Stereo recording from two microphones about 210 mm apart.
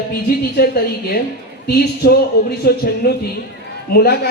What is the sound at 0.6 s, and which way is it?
Speech, 50° left (ahead or behind).